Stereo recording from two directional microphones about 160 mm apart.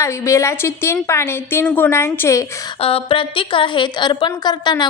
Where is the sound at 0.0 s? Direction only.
20° left (ahead or behind).